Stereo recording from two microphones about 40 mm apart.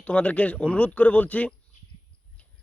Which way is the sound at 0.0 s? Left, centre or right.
Left.